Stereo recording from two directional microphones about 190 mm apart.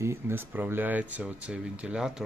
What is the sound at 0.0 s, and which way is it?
Speech, 15° right (ahead or behind).